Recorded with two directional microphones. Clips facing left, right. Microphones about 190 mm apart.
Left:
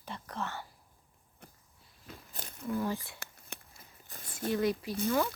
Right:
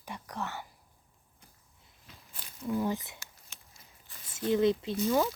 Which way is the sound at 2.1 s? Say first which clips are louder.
Left 6 dB; 45° left (ahead or behind).